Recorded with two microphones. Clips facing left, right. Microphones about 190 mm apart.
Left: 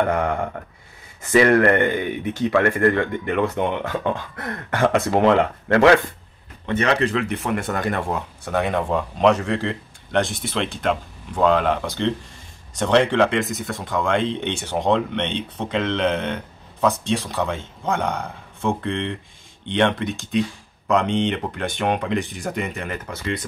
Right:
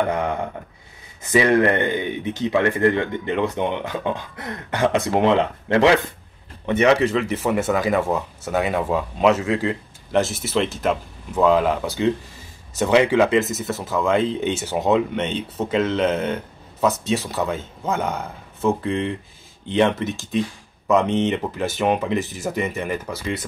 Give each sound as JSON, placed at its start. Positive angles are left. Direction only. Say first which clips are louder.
{"t": 1.2, "sound": "speech", "louder": "left 1 dB", "side_deg": -20}
{"t": 7.1, "sound": "speech", "louder": "right 2 dB", "side_deg": 0}